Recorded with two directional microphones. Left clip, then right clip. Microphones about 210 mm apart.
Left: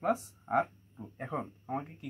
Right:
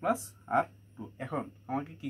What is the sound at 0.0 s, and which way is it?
A man's voice, 10° left (ahead or behind).